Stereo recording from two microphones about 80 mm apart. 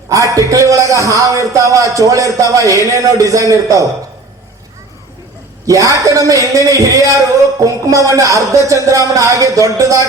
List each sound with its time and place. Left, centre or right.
0.1 s speech: right
5.6 s speech: right